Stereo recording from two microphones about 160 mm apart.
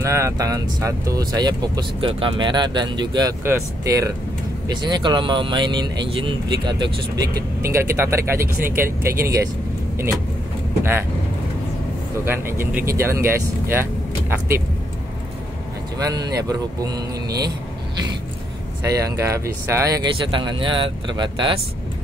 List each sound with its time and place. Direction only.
0.0 s speech: 20° right (ahead or behind)
10.8 s speech: 15° right (ahead or behind)
12.3 s speech: 15° right (ahead or behind)
16.0 s speech: 25° right (ahead or behind)
18.8 s speech: 20° right (ahead or behind)
20.2 s speech: 30° right (ahead or behind)